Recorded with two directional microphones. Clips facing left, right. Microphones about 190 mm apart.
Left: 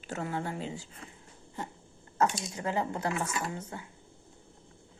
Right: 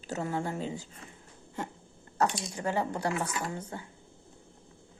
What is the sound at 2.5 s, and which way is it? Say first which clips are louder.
Speech: right 1 dB; 35° right (ahead or behind).